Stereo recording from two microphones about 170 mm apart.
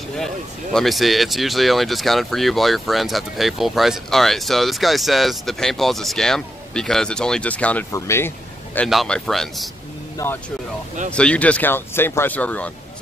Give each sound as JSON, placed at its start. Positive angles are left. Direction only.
{"t": 0.7, "sound": "speech", "side_deg": 0}
{"t": 8.7, "sound": "speech", "side_deg": 5}
{"t": 10.1, "sound": "speech", "side_deg": 15}